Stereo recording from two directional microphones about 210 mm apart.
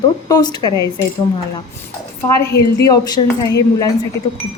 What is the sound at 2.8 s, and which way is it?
Speech, 20° left (ahead or behind).